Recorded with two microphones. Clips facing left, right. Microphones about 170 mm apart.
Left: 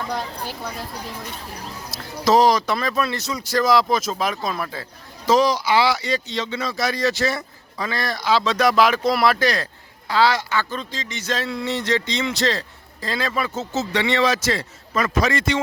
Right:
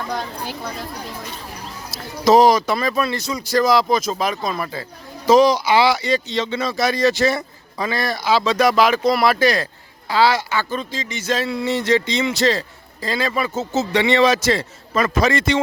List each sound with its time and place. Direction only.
0.1 s speech: centre (ahead or behind)
2.2 s speech: 10° right (ahead or behind)
5.2 s a man's voice: 15° right (ahead or behind)